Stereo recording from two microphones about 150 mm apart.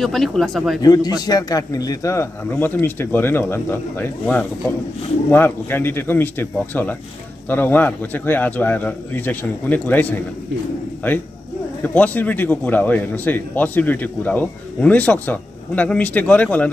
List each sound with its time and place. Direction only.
0.0 s speech: centre (ahead or behind)
0.8 s a man's voice: 25° left (ahead or behind)
11.8 s a man's voice: 10° left (ahead or behind)